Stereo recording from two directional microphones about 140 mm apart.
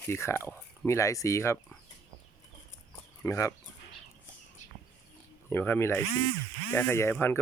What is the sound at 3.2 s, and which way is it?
Speech, 25° left (ahead or behind).